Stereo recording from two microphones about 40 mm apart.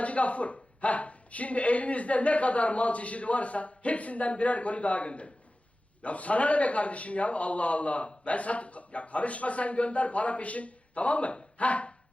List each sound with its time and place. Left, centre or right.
0.0 s a man's voice: left